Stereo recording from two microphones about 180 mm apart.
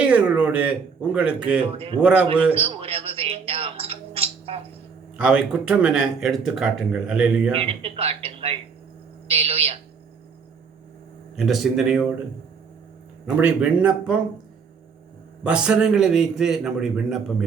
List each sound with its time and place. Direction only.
0.0 s speech: 5° right (ahead or behind)
2.6 s a sound: 30° right (ahead or behind)
5.1 s speech: 5° right (ahead or behind)
7.5 s a man's voice: 30° right (ahead or behind)
11.3 s speech: centre (ahead or behind)
13.3 s speech: 10° right (ahead or behind)
15.4 s speech: 5° right (ahead or behind)